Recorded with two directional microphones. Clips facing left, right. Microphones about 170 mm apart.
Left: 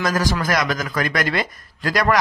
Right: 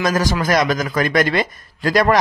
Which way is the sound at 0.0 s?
20° right (ahead or behind).